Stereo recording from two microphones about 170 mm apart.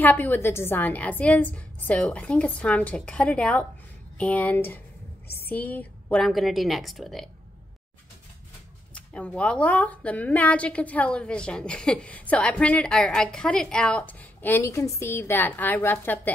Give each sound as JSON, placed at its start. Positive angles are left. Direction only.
{"t": 0.0, "sound": "a woman's voice", "side_deg": 10}
{"t": 8.9, "sound": "a woman's voice", "side_deg": 5}